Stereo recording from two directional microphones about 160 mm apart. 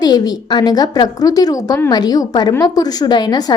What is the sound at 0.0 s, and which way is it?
A woman's voice, 25° left (ahead or behind).